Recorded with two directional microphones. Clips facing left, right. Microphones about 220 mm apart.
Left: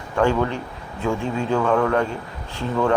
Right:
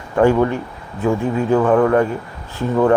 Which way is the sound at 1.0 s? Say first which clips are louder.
Right 5 dB; 55° right (ahead or behind).